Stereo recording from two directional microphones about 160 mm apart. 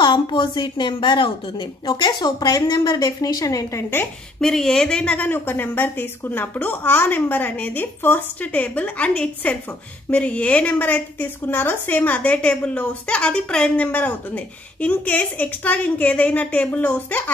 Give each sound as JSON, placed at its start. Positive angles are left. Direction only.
{"t": 0.0, "sound": "a woman's voice", "side_deg": 30}
{"t": 4.4, "sound": "a woman's voice", "side_deg": 5}